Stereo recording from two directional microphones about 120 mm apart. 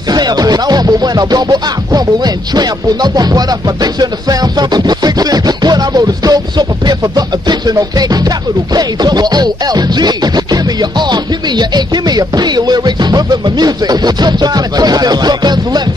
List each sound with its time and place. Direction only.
0.1 s music: 35° right (ahead or behind)